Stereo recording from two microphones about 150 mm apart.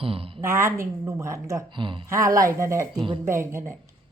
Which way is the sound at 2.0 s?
20° right (ahead or behind).